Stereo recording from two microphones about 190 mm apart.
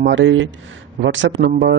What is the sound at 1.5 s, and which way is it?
Speech, 65° right (ahead or behind).